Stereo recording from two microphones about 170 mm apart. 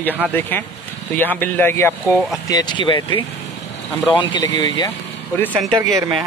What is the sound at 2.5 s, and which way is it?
Speech, 25° left (ahead or behind).